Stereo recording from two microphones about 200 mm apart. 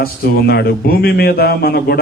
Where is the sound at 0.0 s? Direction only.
50° left (ahead or behind).